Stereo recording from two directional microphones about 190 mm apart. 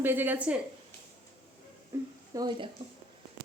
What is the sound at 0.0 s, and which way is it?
Speech, 10° right (ahead or behind).